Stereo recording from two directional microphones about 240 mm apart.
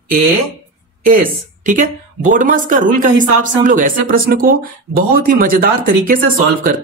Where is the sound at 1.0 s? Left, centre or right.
Right.